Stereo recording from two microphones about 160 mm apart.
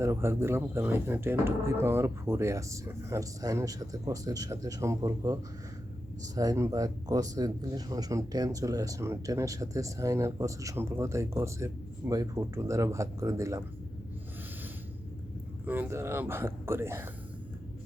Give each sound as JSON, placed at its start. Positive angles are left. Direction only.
{"t": 0.0, "sound": "speech", "side_deg": -15}
{"t": 15.6, "sound": "speech", "side_deg": -10}